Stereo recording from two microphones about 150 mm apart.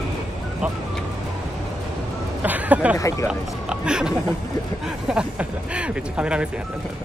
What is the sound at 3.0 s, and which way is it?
Speech, 20° left (ahead or behind).